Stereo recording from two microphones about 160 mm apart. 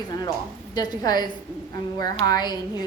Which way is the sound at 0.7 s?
25° left (ahead or behind).